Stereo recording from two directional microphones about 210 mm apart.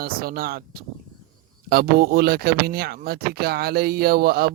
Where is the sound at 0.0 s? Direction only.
45° right (ahead or behind).